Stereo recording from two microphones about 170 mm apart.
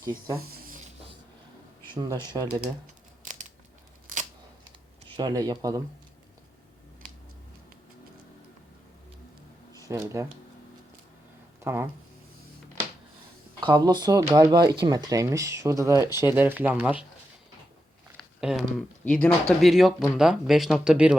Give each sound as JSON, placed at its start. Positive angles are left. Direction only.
{"t": 0.3, "sound": "a sound", "side_deg": -60}
{"t": 2.0, "sound": "speech", "side_deg": -25}
{"t": 4.0, "sound": "camera", "side_deg": -45}
{"t": 4.6, "sound": "computer keyboard", "side_deg": -25}
{"t": 9.9, "sound": "speech", "side_deg": -20}
{"t": 11.6, "sound": "speech", "side_deg": -15}
{"t": 13.6, "sound": "speech", "side_deg": -25}
{"t": 18.2, "sound": "speech", "side_deg": 0}